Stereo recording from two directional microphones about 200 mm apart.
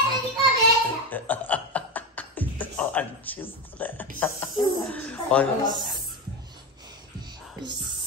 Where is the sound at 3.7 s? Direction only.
10° left (ahead or behind).